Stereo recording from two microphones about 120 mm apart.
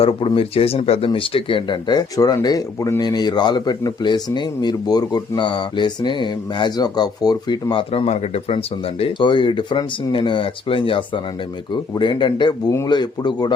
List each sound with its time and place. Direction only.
0.3 s speech: 50° left (ahead or behind)